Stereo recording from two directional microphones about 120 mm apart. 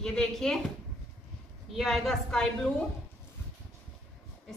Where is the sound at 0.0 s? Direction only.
5° left (ahead or behind).